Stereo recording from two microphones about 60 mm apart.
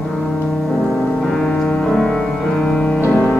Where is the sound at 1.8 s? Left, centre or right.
Centre.